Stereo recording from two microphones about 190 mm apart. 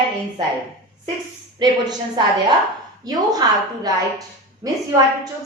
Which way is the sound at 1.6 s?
25° right (ahead or behind).